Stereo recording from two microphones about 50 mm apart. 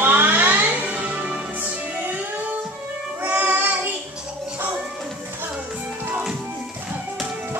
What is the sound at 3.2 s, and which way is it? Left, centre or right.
Child singing, right.